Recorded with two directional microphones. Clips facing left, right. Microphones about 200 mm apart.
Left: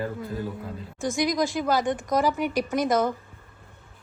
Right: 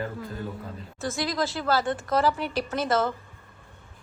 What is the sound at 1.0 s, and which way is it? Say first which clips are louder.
Speech: left 4 dB; 15° left (ahead or behind).